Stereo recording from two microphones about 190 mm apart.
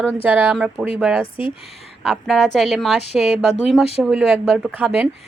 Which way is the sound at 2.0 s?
Centre (ahead or behind).